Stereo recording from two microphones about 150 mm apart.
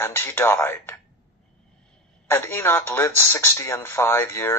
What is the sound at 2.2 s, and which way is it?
Speech, 15° left (ahead or behind).